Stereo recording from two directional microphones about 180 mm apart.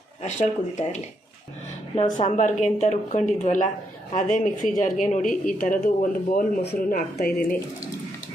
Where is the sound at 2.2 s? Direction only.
40° left (ahead or behind).